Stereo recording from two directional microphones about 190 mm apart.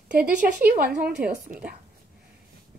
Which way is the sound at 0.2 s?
50° right (ahead or behind).